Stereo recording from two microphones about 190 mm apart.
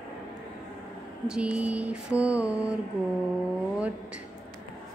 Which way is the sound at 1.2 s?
5° right (ahead or behind).